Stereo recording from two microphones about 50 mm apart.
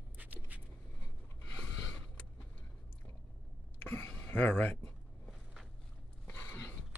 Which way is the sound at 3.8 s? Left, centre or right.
Left.